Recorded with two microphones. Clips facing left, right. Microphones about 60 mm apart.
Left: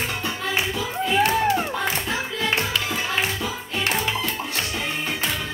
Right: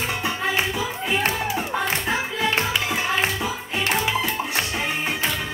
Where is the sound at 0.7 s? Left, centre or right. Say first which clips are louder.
Left 1 dB; centre.